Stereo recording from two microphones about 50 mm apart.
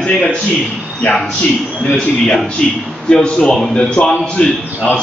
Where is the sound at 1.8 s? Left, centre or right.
Centre.